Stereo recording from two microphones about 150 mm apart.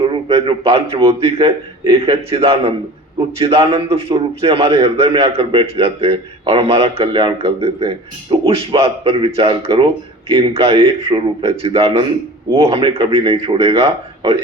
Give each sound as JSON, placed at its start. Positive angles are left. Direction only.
{"t": 0.1, "sound": "a man's voice", "side_deg": -35}